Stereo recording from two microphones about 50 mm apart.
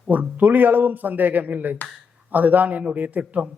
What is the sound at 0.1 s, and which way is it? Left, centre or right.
A man's voice, right.